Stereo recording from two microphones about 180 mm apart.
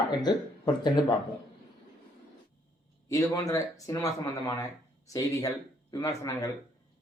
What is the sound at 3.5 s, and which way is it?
Speech, 20° left (ahead or behind).